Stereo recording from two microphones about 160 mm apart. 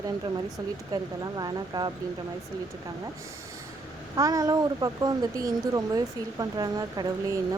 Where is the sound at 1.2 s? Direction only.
25° right (ahead or behind).